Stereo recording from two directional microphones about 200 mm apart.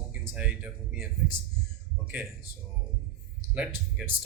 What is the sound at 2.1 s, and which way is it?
Speech, 10° right (ahead or behind).